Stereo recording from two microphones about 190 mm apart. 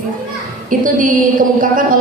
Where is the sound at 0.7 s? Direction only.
45° right (ahead or behind).